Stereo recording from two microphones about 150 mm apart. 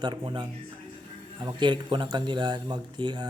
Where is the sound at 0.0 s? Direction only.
30° right (ahead or behind).